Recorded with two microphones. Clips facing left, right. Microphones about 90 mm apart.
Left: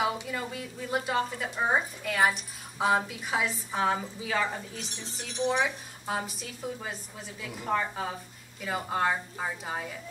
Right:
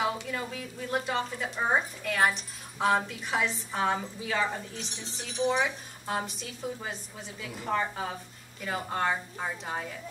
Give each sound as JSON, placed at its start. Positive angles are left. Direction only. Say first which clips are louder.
{"t": 0.0, "sound": "a woman's voice", "louder": "left 1 dB", "side_deg": 10}